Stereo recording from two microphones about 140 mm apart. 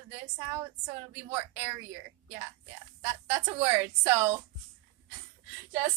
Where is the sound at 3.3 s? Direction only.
20° right (ahead or behind).